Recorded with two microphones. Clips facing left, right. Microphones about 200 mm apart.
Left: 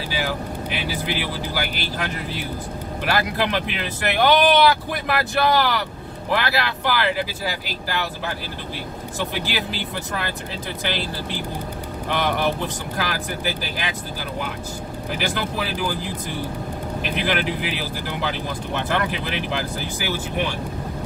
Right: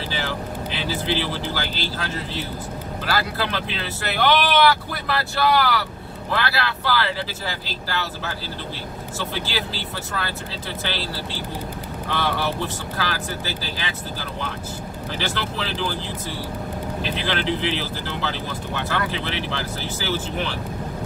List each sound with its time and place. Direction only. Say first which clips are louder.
0.1 s speech: left 4 dB; 10° left (ahead or behind)
9.2 s speech: left 2 dB; 15° left (ahead or behind)
15.1 s speech: left 2 dB; 15° left (ahead or behind)